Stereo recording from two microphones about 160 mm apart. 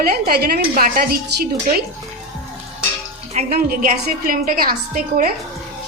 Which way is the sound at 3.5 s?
65° right (ahead or behind).